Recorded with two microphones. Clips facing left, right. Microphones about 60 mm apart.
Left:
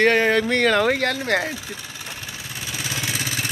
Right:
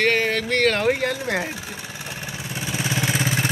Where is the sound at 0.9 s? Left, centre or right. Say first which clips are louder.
Left 2 dB; left.